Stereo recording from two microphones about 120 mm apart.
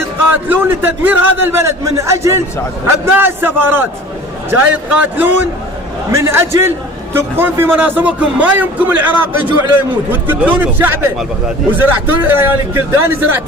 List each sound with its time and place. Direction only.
0.0 s a man's voice: 15° right (ahead or behind)